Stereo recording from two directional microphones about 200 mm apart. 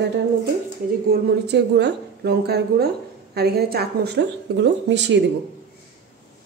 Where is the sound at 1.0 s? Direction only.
55° right (ahead or behind).